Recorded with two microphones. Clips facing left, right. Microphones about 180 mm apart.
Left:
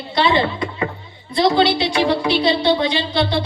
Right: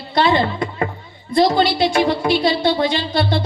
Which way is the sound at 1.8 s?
50° right (ahead or behind).